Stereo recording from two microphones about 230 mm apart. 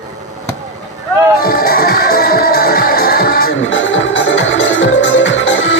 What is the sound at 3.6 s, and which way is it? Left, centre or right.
Music, left.